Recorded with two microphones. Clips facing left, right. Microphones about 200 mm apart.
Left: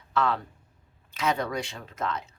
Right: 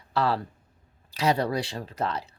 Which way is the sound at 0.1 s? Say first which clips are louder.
Right 1 dB; 35° right (ahead or behind).